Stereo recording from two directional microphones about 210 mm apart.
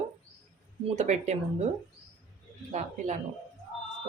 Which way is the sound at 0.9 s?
35° right (ahead or behind).